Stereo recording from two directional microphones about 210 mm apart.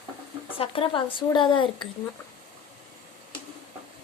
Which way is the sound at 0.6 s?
25° left (ahead or behind).